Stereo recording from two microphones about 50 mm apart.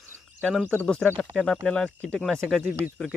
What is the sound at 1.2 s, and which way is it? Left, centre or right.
Speech, centre.